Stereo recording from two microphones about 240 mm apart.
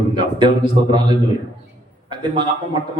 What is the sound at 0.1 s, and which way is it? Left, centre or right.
A man's voice, centre.